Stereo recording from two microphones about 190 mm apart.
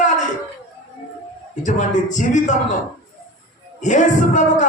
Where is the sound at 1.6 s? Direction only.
40° left (ahead or behind).